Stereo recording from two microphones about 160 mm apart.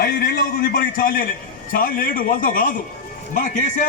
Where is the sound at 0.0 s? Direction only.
65° left (ahead or behind).